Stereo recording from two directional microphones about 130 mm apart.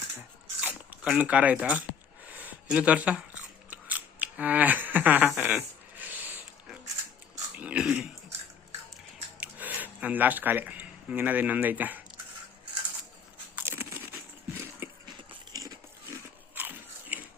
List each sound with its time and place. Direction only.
0.2 s a sound: 10° right (ahead or behind)
1.2 s speech: 10° right (ahead or behind)
2.2 s scissors: 10° right (ahead or behind)
5.4 s a sound: 10° right (ahead or behind)
9.4 s speech: 10° right (ahead or behind)
13.6 s crunch: 15° right (ahead or behind)
15.0 s biting: 30° right (ahead or behind)
16.6 s biting: 15° right (ahead or behind)